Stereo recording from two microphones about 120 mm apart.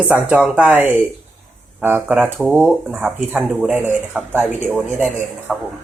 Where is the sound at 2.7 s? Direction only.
5° right (ahead or behind).